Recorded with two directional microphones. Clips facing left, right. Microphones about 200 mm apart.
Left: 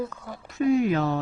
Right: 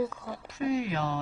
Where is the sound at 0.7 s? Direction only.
50° left (ahead or behind).